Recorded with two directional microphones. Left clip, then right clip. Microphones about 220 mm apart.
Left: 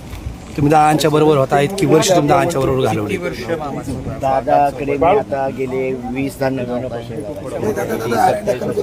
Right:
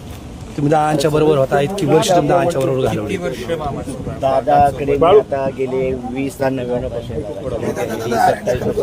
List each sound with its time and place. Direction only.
0.7 s speech: 10° left (ahead or behind)
4.2 s speech: centre (ahead or behind)
4.9 s speech: 35° right (ahead or behind)
5.3 s speech: centre (ahead or behind)
7.9 s speech: centre (ahead or behind)